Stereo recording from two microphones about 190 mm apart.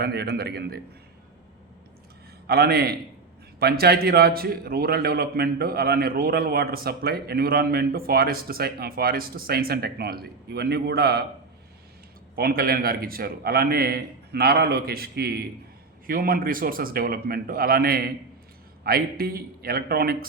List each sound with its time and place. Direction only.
0.0 s a man's voice: 60° right (ahead or behind)
2.5 s a man's voice: 55° right (ahead or behind)
12.4 s a man's voice: 55° right (ahead or behind)